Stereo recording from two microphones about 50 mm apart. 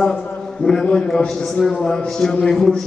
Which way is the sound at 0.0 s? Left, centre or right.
Centre.